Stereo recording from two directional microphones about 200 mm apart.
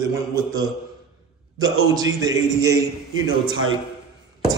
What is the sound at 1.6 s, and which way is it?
A man's voice, 20° right (ahead or behind).